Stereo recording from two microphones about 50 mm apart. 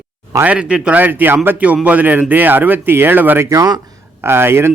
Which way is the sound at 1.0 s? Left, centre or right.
Right.